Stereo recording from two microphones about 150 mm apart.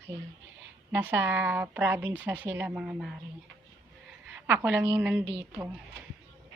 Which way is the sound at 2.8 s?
5° right (ahead or behind).